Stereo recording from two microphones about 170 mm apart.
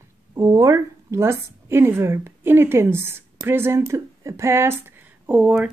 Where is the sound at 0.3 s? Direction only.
20° right (ahead or behind).